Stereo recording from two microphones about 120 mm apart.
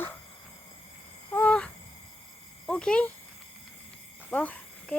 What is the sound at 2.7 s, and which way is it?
Speech, 5° left (ahead or behind).